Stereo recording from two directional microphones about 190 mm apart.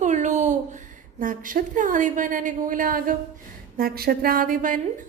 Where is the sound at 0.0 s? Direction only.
40° right (ahead or behind).